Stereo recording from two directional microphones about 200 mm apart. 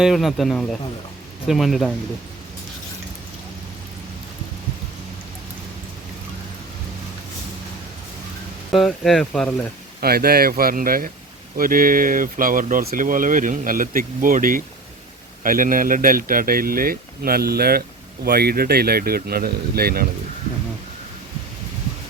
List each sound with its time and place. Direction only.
0.0 s speech: centre (ahead or behind)
8.7 s speech: centre (ahead or behind)
10.0 s speech: 50° right (ahead or behind)